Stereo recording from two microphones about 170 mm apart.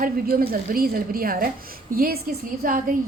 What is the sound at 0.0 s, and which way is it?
A woman's voice, 60° right (ahead or behind).